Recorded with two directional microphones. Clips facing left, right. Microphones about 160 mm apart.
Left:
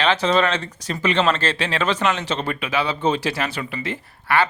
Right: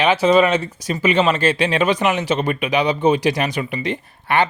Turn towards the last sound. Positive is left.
turn(degrees=-20)  # may be behind; listen again after turning